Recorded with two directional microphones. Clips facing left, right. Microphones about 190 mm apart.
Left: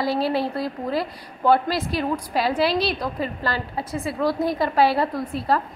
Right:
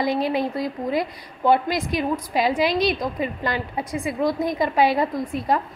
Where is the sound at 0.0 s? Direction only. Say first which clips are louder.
Even; 15° right (ahead or behind).